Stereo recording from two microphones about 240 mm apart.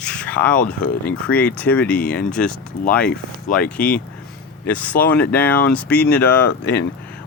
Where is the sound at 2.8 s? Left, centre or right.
Left.